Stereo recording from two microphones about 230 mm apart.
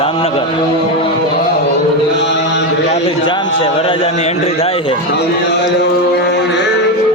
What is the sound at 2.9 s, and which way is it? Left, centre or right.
Speech, left.